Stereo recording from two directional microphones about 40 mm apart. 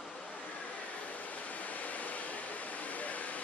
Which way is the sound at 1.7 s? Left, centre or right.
Left.